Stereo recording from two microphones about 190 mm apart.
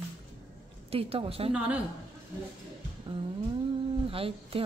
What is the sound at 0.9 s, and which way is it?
Speech, 30° right (ahead or behind).